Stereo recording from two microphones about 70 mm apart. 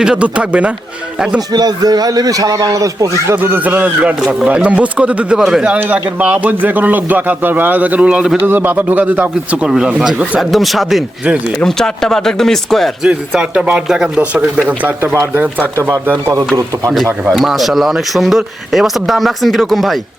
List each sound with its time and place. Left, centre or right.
0.0 s a man's voice: centre
1.5 s a man's voice: right
3.2 s a man's voice: right; by 5.4 s centre
5.4 s a man's voice: centre
5.7 s a man's voice: right
8.4 s a man's voice: right
9.6 s a man's voice: centre
10.5 s speech: centre
11.6 s speech: centre
13.0 s a man's voice: centre
14.7 s a man's voice: right
16.2 s a man's voice: right
17.3 s speech: centre